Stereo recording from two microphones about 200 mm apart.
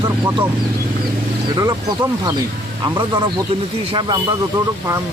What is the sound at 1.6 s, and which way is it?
Speech, 15° right (ahead or behind).